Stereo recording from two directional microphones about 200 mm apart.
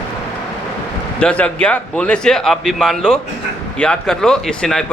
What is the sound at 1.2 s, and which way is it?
Speech, 5° left (ahead or behind).